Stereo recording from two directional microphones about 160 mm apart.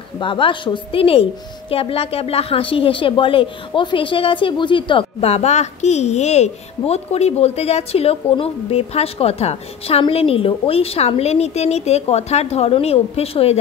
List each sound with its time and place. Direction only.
0.2 s a woman's voice: 30° left (ahead or behind)